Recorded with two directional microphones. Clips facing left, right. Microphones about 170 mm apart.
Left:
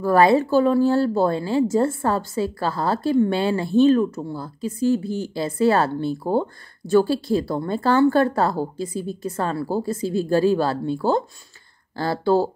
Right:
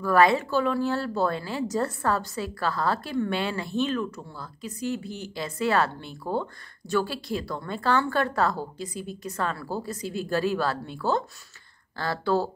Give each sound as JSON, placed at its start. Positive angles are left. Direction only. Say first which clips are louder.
{"t": 0.0, "sound": "speech", "louder": "left 5 dB", "side_deg": 30}